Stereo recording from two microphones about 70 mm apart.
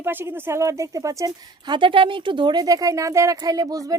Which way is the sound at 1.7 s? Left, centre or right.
Right.